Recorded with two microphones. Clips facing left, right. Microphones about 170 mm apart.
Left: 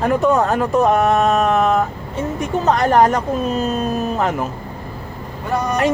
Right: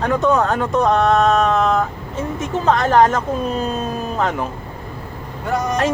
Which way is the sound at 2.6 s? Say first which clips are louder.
Even; 5° left (ahead or behind).